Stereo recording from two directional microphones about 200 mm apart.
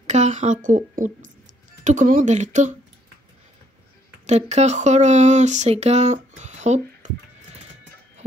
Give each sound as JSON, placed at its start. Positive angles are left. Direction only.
{"t": 0.0, "sound": "a woman's voice", "side_deg": -35}
{"t": 4.3, "sound": "speech", "side_deg": -35}